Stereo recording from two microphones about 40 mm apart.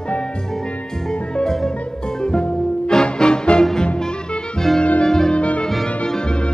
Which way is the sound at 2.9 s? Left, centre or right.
Left.